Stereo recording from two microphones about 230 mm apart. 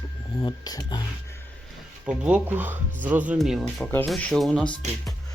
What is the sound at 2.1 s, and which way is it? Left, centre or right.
Speech, centre.